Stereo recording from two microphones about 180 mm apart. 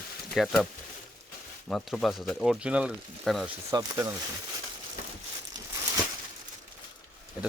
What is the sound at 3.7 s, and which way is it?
Speech, 20° right (ahead or behind).